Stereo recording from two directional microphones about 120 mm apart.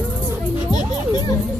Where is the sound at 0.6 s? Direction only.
35° left (ahead or behind).